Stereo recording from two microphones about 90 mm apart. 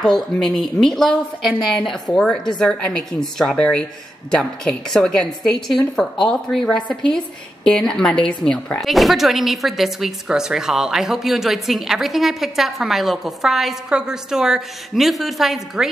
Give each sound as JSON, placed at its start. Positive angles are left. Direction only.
{"t": 0.0, "sound": "speech", "side_deg": 5}
{"t": 2.1, "sound": "a woman's voice", "side_deg": 15}